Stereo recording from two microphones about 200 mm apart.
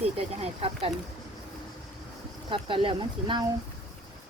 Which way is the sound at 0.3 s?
30° right (ahead or behind).